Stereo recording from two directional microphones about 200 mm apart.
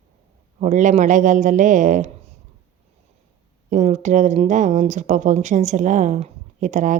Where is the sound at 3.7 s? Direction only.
35° right (ahead or behind).